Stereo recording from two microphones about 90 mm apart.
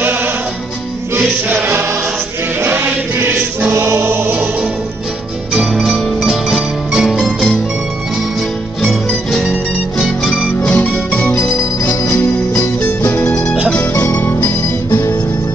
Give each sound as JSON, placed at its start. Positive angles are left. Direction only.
{"t": 1.5, "sound": "choir", "side_deg": -25}
{"t": 2.6, "sound": "music", "side_deg": -25}
{"t": 5.5, "sound": "music", "side_deg": -5}
{"t": 8.8, "sound": "music", "side_deg": 5}